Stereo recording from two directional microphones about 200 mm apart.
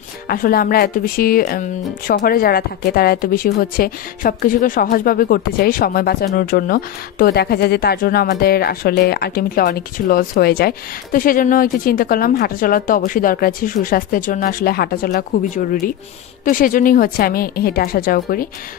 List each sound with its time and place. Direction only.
0.3 s a woman's voice: 45° left (ahead or behind)